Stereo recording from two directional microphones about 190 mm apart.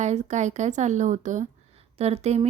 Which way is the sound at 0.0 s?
35° right (ahead or behind).